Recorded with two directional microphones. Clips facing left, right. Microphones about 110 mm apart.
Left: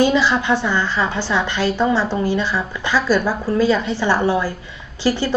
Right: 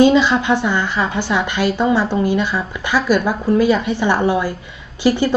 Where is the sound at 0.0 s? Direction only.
20° right (ahead or behind).